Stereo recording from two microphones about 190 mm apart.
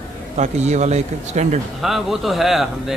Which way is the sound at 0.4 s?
35° right (ahead or behind).